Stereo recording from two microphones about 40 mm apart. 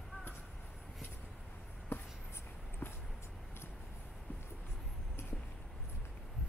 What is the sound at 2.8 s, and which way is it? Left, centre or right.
Vehicle, left.